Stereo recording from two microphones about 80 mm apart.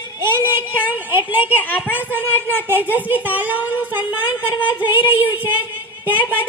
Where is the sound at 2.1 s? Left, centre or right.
Right.